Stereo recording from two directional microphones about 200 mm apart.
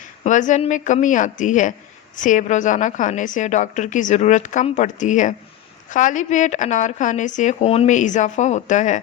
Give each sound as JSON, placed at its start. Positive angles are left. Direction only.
{"t": 0.3, "sound": "a woman's voice", "side_deg": 40}